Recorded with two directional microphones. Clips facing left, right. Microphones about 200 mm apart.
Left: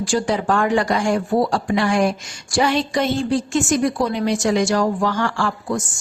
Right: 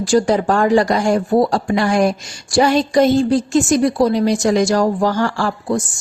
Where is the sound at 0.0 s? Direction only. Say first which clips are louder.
Right 6 dB; 40° right (ahead or behind).